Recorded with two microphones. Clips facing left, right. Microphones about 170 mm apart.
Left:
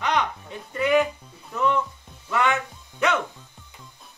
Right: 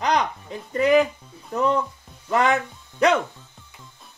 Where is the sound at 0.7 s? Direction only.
35° right (ahead or behind).